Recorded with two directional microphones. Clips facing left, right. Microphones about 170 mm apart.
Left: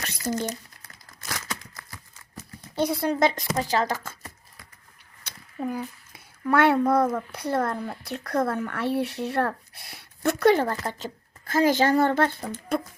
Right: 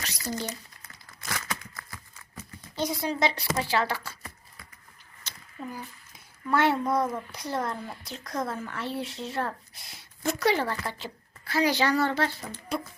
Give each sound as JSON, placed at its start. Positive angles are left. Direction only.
{"t": 0.0, "sound": "a sound", "side_deg": 50}
{"t": 2.3, "sound": "speech", "side_deg": 60}
{"t": 5.2, "sound": "a child's voice", "side_deg": 60}